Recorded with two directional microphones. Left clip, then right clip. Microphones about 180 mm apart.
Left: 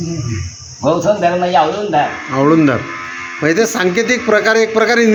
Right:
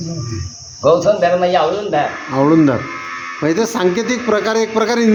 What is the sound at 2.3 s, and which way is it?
A man's voice, 15° right (ahead or behind).